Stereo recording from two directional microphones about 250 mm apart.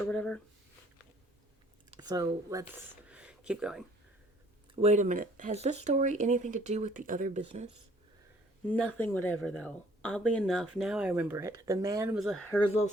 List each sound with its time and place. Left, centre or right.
0.1 s speech: centre
1.9 s speech: centre
3.1 s a sound: centre
4.7 s speech: right
8.6 s speech: centre